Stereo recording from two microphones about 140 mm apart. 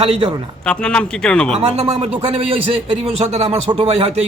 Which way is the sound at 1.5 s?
45° right (ahead or behind).